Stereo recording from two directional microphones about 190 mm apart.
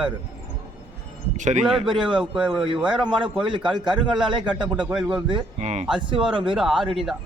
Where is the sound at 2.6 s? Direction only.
25° right (ahead or behind).